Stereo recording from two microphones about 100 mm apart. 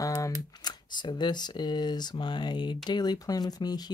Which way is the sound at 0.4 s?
45° left (ahead or behind).